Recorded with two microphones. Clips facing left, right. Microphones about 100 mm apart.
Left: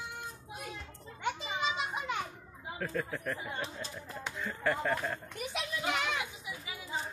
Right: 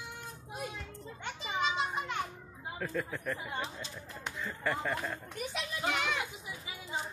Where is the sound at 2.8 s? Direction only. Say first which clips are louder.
Left 1 dB; centre (ahead or behind).